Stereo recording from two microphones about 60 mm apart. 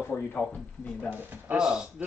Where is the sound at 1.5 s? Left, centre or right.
Centre.